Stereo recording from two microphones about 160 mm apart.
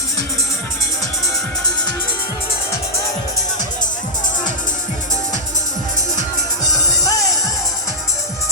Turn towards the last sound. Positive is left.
turn(degrees=20)  # may be behind; listen again after turning